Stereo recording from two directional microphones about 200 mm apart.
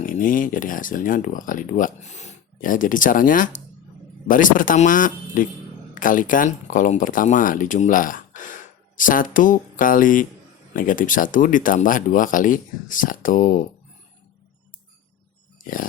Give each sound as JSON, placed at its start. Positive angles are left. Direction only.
{"t": 0.0, "sound": "speech", "side_deg": 40}